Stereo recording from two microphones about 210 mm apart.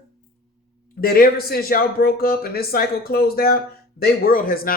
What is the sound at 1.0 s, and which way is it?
Speech, 45° left (ahead or behind).